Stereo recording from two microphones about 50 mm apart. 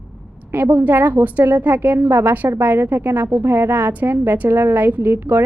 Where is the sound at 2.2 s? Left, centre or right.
Right.